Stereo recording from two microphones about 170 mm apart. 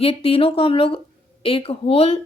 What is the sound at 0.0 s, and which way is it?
A woman's voice, 35° left (ahead or behind).